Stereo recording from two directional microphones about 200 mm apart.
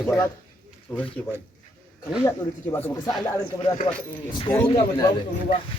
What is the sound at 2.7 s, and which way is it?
Speech, 15° left (ahead or behind).